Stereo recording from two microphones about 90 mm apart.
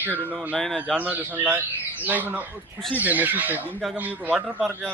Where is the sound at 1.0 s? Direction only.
20° right (ahead or behind).